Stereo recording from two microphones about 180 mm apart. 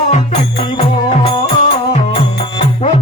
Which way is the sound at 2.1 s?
30° left (ahead or behind).